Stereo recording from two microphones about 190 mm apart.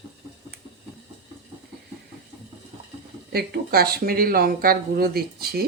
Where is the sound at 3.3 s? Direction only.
55° right (ahead or behind).